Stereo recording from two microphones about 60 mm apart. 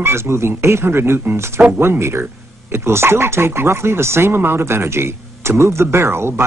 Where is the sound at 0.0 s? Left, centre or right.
Right.